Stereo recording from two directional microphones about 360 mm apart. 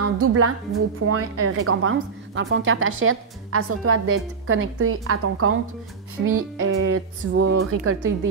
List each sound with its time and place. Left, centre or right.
0.0 s music: right
1.0 s a woman's voice: right